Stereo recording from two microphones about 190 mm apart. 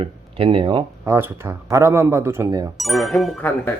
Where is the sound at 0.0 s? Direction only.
30° right (ahead or behind).